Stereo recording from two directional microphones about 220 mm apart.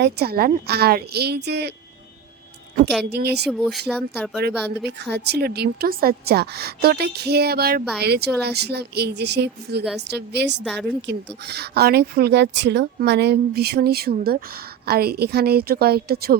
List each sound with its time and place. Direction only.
0.0 s a woman's voice: 45° right (ahead or behind)
3.0 s a woman's voice: 50° right (ahead or behind)
3.8 s speech: 5° right (ahead or behind)
4.8 s a woman's voice: 50° right (ahead or behind)